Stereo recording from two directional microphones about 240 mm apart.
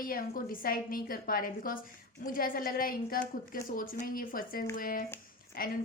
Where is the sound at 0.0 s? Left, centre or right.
Left.